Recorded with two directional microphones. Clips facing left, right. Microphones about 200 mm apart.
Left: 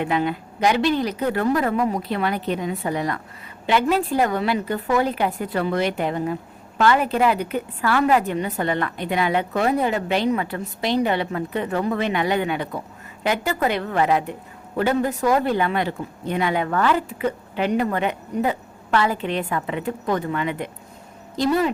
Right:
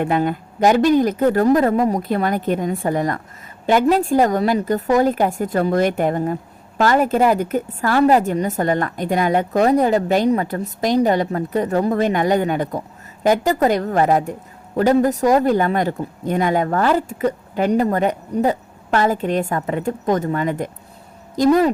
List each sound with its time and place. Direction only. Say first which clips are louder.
0.0 s a woman's voice: right 3 dB; 50° right (ahead or behind)